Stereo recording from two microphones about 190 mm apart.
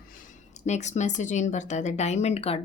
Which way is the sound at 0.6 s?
35° left (ahead or behind).